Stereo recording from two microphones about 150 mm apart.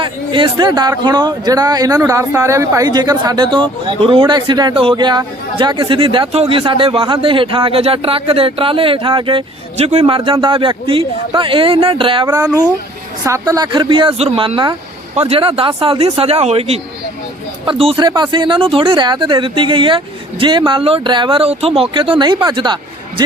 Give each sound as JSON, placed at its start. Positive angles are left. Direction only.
{"t": 0.0, "sound": "a man's voice", "side_deg": -30}